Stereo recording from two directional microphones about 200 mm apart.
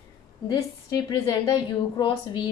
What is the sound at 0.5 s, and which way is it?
A woman's voice, 20° left (ahead or behind).